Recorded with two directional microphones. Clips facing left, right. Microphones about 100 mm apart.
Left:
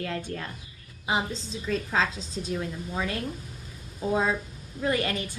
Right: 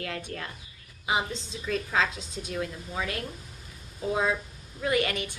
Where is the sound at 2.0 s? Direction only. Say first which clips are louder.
Left 1 dB; 30° left (ahead or behind).